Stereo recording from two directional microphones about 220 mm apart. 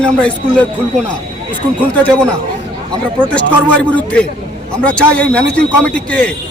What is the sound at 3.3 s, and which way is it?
Speech, 5° left (ahead or behind).